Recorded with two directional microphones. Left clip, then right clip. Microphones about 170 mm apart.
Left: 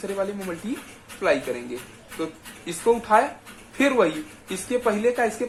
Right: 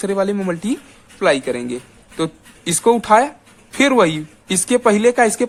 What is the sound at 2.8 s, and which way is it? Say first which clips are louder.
Speech: right 6 dB; 65° right (ahead or behind).